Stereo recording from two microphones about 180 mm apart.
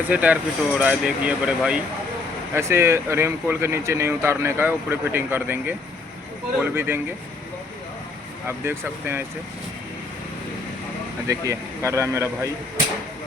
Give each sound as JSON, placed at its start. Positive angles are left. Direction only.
{"t": 0.1, "sound": "speech", "side_deg": -10}
{"t": 8.4, "sound": "speech", "side_deg": -15}
{"t": 11.3, "sound": "speech", "side_deg": -15}